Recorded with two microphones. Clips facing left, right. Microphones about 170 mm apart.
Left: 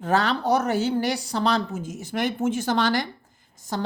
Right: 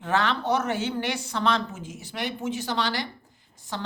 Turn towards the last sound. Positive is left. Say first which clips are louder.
# left 5 dB
turn(degrees=40)  # may be behind; listen again after turning